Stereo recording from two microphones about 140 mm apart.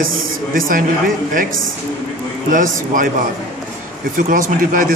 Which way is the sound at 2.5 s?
70° right (ahead or behind).